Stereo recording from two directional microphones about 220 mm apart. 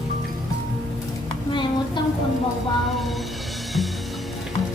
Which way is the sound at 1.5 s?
20° left (ahead or behind).